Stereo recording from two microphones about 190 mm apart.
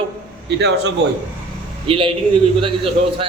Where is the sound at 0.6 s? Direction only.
60° right (ahead or behind).